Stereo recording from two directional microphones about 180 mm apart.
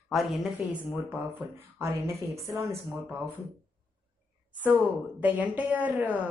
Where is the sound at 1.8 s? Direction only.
15° right (ahead or behind).